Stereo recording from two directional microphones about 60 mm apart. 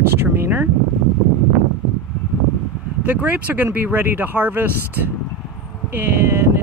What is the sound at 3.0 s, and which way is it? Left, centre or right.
Speech, right.